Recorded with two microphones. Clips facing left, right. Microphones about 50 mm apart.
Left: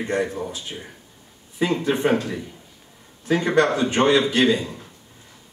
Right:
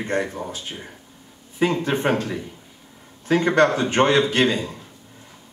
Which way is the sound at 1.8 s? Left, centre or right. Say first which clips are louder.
Left 1 dB; right.